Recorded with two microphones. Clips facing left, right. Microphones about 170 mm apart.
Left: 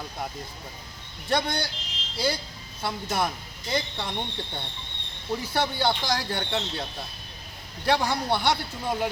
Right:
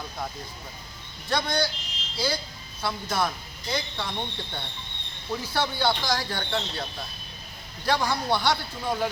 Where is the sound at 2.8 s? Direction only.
20° left (ahead or behind).